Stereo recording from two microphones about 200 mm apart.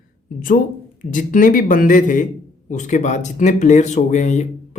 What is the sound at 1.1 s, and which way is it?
Speech, 40° left (ahead or behind).